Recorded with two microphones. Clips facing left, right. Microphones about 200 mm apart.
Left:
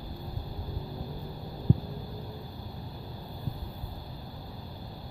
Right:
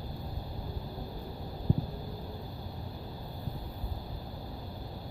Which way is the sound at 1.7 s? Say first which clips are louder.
Left 3 dB; 15° right (ahead or behind).